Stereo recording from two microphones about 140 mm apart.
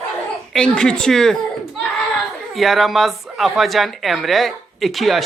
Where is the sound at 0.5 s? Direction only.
5° left (ahead or behind).